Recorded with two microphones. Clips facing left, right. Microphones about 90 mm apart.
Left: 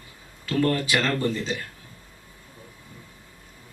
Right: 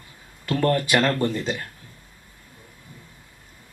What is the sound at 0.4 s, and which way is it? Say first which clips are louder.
Speech: right 2 dB; 50° right (ahead or behind).